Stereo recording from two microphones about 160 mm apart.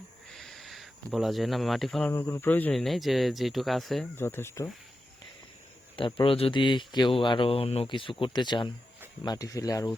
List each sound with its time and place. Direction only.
0.3 s a sound: centre (ahead or behind)
2.0 s speech: 15° left (ahead or behind)
4.2 s speech: 15° left (ahead or behind)
6.0 s speech: 30° left (ahead or behind)